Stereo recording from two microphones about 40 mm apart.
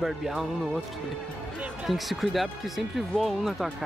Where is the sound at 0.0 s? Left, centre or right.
Centre.